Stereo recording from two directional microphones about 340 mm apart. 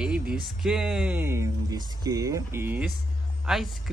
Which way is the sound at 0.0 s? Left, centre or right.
Centre.